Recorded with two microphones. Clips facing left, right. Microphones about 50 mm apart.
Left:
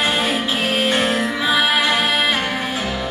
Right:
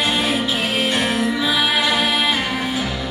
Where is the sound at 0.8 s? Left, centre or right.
Left.